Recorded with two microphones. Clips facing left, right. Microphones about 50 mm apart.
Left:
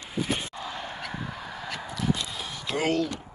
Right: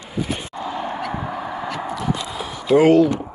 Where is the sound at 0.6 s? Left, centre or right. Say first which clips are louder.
Right 10 dB; centre.